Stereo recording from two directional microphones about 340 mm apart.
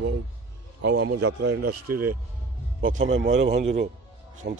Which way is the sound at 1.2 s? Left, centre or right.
Right.